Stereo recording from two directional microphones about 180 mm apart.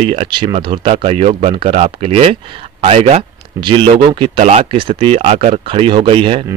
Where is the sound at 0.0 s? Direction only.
35° right (ahead or behind).